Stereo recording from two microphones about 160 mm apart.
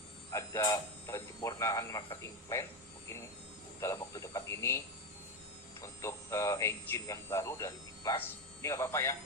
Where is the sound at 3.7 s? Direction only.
20° left (ahead or behind).